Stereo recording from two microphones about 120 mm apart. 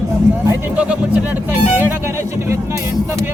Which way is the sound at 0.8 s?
10° right (ahead or behind).